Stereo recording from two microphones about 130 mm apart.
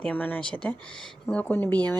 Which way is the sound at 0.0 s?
10° left (ahead or behind).